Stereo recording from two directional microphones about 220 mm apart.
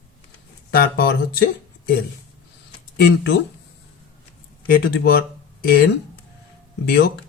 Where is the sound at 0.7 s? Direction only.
45° left (ahead or behind).